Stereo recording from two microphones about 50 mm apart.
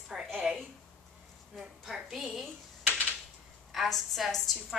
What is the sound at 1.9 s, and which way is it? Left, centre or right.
Speech, centre.